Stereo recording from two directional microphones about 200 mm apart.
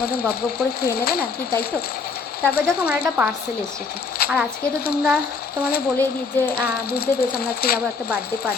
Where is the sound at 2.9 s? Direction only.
10° right (ahead or behind).